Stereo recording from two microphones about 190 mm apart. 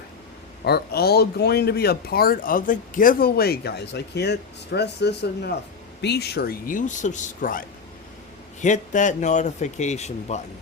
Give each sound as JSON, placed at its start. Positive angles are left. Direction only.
{"t": 0.6, "sound": "speech", "side_deg": 55}
{"t": 8.6, "sound": "a man's voice", "side_deg": 40}